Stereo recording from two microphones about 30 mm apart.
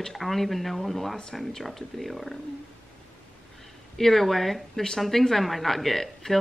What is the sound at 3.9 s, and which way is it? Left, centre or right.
A woman's voice, centre.